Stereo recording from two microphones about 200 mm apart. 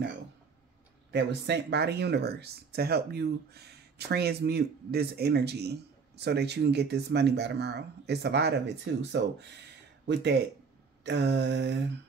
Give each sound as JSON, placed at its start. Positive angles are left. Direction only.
{"t": 1.1, "sound": "speech", "side_deg": -60}
{"t": 11.1, "sound": "speech", "side_deg": -60}